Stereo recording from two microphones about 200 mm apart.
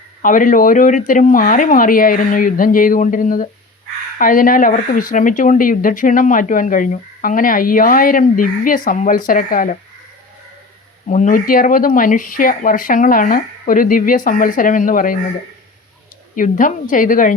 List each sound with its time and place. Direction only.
0.2 s speech: 40° left (ahead or behind)
11.1 s speech: 40° left (ahead or behind)
16.3 s speech: 40° left (ahead or behind)